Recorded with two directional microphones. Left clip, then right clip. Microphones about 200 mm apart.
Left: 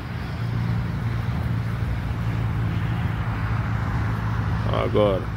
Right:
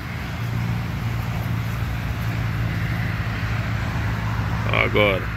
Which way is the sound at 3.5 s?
40° right (ahead or behind).